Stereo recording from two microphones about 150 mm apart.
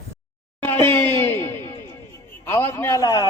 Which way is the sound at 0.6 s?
15° left (ahead or behind).